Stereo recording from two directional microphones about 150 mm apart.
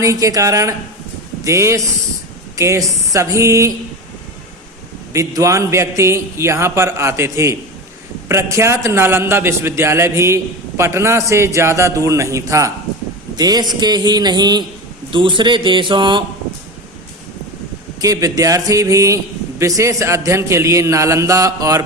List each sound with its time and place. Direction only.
0.0 s a man's voice: 20° right (ahead or behind)
5.1 s a man's voice: 20° right (ahead or behind)
18.0 s a man's voice: 25° right (ahead or behind)